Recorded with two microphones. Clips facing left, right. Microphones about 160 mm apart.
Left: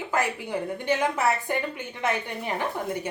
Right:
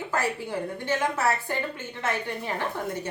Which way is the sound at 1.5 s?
15° left (ahead or behind).